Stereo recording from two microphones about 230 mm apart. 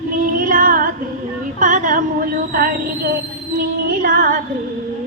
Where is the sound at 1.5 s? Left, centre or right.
Right.